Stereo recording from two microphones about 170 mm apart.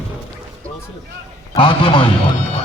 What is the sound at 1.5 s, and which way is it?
Speech, 30° left (ahead or behind).